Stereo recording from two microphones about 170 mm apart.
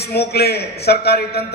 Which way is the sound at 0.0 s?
70° left (ahead or behind).